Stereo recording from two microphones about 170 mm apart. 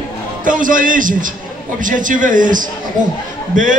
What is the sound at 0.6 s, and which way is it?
A man's voice, 50° right (ahead or behind).